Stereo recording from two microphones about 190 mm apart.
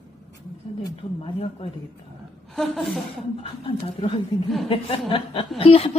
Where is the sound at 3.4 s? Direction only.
30° left (ahead or behind).